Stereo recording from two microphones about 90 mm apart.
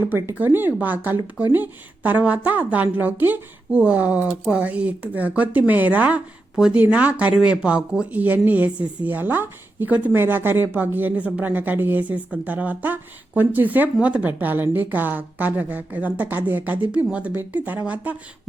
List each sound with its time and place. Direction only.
0.1 s a woman's voice: 30° right (ahead or behind)